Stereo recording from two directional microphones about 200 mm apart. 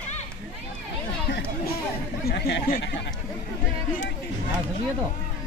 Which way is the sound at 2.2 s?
55° left (ahead or behind).